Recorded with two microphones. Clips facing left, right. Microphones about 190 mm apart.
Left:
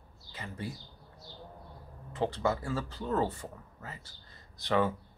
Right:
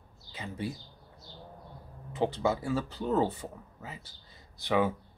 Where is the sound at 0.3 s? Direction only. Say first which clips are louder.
Right 3 dB; 20° right (ahead or behind).